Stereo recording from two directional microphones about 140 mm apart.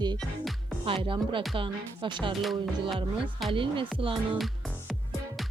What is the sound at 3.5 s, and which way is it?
Speech, 40° right (ahead or behind).